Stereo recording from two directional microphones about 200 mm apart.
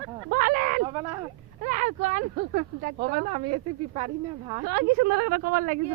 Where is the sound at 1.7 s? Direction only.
40° right (ahead or behind).